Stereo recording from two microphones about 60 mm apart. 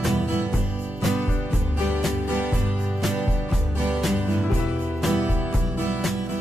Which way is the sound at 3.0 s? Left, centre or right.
Centre.